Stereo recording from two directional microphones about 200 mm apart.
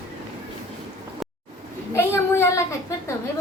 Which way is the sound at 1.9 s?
10° left (ahead or behind).